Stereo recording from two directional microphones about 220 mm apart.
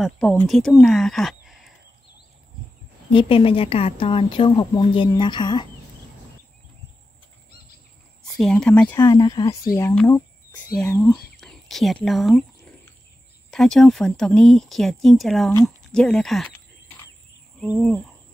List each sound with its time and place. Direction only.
0.0 s speech: 5° left (ahead or behind)
3.1 s speech: 25° left (ahead or behind)
8.4 s speech: 5° left (ahead or behind)
13.5 s speech: centre (ahead or behind)
17.6 s speech: centre (ahead or behind)